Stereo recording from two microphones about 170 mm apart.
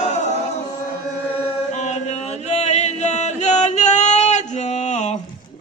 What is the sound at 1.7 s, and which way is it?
Chant, 40° left (ahead or behind).